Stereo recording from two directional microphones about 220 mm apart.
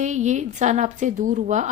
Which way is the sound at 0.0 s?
35° right (ahead or behind).